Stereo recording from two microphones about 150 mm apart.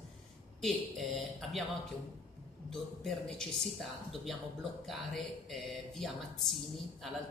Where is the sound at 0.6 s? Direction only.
Centre (ahead or behind).